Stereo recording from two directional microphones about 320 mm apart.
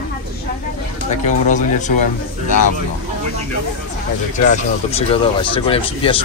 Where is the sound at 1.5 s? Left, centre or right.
Left.